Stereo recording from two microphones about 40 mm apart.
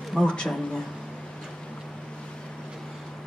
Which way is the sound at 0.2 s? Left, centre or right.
Left.